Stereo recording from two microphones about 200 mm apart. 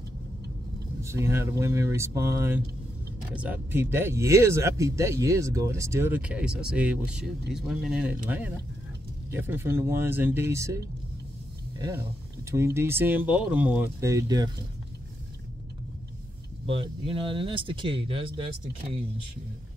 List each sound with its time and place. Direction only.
1.0 s speech: 15° right (ahead or behind)
12.4 s speech: 15° right (ahead or behind)
16.6 s speech: 30° right (ahead or behind)